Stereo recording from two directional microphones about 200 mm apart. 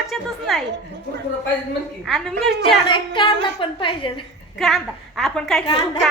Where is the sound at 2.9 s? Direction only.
25° left (ahead or behind).